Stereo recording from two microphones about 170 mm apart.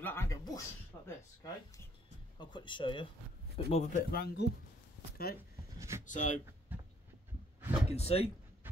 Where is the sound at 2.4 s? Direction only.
25° left (ahead or behind).